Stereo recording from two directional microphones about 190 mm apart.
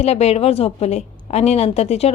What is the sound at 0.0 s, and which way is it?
A woman's voice, 35° left (ahead or behind).